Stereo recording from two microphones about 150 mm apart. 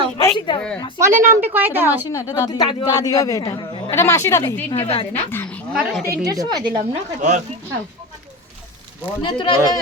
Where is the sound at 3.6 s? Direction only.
35° left (ahead or behind).